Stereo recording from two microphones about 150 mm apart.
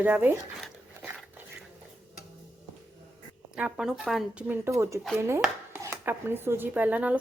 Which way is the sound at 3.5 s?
5° right (ahead or behind).